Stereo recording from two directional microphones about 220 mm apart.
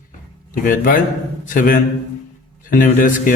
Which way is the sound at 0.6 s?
40° left (ahead or behind).